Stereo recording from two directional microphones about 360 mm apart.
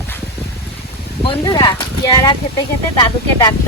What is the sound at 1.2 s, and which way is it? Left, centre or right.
Speech, centre.